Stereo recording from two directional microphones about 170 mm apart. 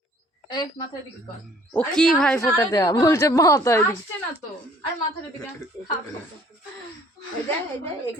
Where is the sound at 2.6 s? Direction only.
20° left (ahead or behind).